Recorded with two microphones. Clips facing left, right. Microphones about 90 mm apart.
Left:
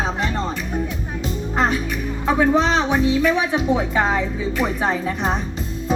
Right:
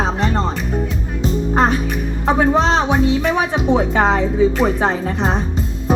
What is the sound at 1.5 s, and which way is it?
Speech, 55° right (ahead or behind).